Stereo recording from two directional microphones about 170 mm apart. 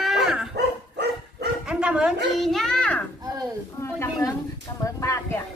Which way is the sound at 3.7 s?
15° left (ahead or behind).